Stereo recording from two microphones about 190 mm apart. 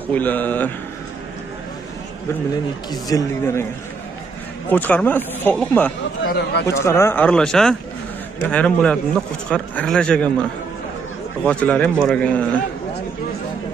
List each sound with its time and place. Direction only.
0.1 s speech: 10° left (ahead or behind)
2.5 s speech: 20° left (ahead or behind)
4.6 s speech: 10° left (ahead or behind)
6.2 s speech: 60° left (ahead or behind)
6.7 s speech: 15° left (ahead or behind)
11.4 s speech: 5° left (ahead or behind)